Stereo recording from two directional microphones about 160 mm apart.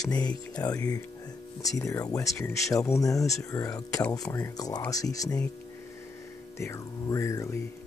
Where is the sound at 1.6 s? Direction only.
20° left (ahead or behind).